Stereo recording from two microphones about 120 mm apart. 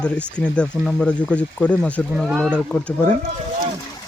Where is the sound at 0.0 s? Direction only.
10° left (ahead or behind).